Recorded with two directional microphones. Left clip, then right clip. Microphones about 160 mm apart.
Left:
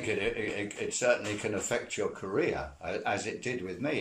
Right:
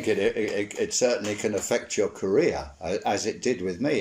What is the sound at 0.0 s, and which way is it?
Speech, 35° right (ahead or behind).